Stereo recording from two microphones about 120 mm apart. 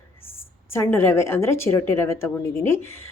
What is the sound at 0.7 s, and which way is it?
A woman's voice, 20° left (ahead or behind).